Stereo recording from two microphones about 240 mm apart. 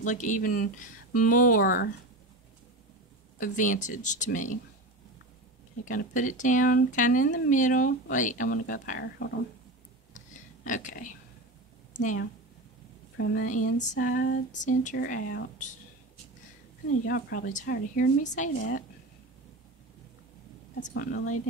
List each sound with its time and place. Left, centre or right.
0.0 s speech: left
3.3 s speech: left
5.9 s speech: left
10.1 s a sound: left
13.2 s speech: left
13.7 s speech: left
17.1 s speech: left
20.9 s speech: left